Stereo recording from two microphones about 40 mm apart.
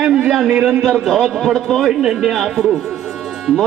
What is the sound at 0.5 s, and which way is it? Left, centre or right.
Speech, right.